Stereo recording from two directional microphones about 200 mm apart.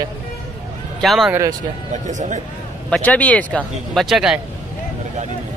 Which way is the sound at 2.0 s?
35° right (ahead or behind).